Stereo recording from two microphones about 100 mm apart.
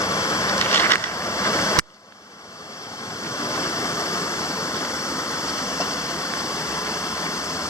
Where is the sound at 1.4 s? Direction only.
30° left (ahead or behind).